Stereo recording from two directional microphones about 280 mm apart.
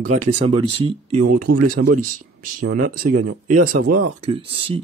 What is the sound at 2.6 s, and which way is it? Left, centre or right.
Speech, right.